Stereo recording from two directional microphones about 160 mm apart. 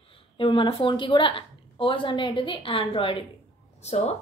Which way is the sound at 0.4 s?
30° left (ahead or behind).